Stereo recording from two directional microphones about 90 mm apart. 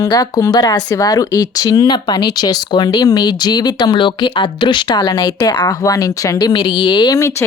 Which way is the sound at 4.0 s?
65° left (ahead or behind).